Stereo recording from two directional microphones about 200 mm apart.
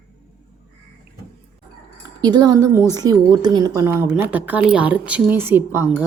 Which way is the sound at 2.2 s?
20° right (ahead or behind).